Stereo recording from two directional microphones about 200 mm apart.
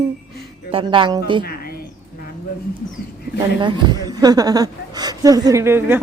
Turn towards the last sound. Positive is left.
turn(degrees=-10)  # may be behind; listen again after turning